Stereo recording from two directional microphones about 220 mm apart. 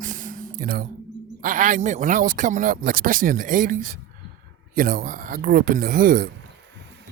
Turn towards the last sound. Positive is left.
turn(degrees=-40)  # may be behind; listen again after turning